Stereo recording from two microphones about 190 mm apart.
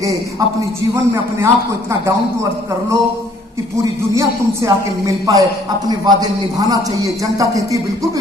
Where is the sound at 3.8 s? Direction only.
15° right (ahead or behind).